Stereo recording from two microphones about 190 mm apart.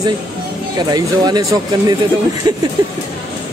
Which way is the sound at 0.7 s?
20° right (ahead or behind).